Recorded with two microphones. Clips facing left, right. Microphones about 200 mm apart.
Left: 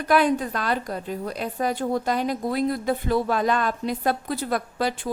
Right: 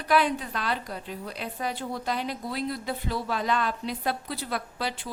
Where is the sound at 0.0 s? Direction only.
45° left (ahead or behind).